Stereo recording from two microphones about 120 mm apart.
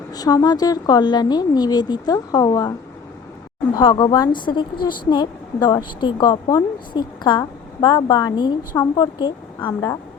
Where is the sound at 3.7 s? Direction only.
40° left (ahead or behind).